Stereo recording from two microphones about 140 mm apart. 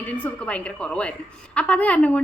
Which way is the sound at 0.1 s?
10° left (ahead or behind).